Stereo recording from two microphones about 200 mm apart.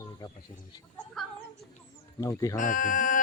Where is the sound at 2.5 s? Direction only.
40° left (ahead or behind).